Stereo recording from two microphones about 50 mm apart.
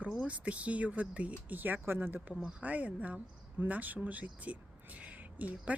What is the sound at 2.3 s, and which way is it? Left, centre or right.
Speech, centre.